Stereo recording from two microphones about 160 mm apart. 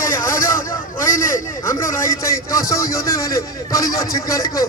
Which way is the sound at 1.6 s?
15° left (ahead or behind).